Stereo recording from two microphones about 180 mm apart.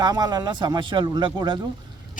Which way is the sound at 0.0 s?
20° right (ahead or behind).